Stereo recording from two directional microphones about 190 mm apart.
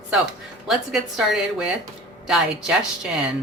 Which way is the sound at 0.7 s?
Centre (ahead or behind).